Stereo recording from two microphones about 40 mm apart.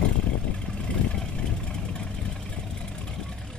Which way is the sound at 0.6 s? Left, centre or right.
Centre.